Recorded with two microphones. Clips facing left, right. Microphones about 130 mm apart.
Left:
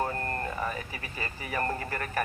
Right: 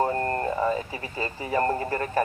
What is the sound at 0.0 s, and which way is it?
Speech, 30° right (ahead or behind).